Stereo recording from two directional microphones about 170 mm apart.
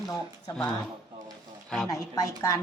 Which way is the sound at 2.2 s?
20° left (ahead or behind).